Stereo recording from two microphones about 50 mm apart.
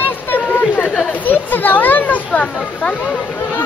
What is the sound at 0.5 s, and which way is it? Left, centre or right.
Chatter, left.